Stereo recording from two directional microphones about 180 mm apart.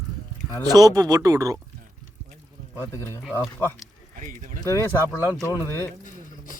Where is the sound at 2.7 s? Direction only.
15° left (ahead or behind).